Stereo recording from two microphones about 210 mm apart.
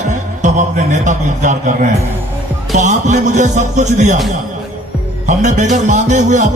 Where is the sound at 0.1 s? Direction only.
35° right (ahead or behind).